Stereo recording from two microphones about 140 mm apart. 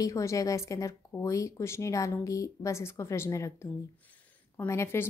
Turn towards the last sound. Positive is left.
turn(degrees=20)  # may be behind; listen again after turning